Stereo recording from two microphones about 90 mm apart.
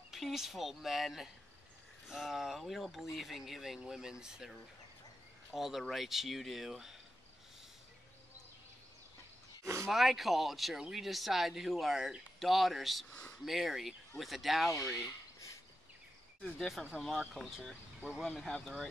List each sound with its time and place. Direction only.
0.1 s speech: 5° right (ahead or behind)
9.6 s a sound: 35° right (ahead or behind)
9.8 s speech: centre (ahead or behind)
13.1 s speech: 10° left (ahead or behind)
13.5 s speech: centre (ahead or behind)
15.0 s a sound: 35° left (ahead or behind)
16.4 s speech: centre (ahead or behind)
18.2 s speech: 5° left (ahead or behind)